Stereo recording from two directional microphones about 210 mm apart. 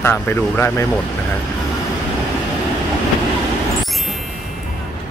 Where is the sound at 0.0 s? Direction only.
10° left (ahead or behind).